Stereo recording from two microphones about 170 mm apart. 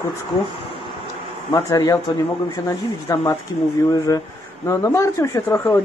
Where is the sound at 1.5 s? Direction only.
20° left (ahead or behind).